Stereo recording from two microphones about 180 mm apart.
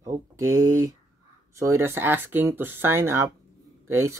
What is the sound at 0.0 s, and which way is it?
Speech, 15° right (ahead or behind).